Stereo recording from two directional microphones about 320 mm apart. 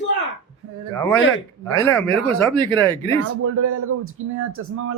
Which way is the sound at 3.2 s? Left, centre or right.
Right.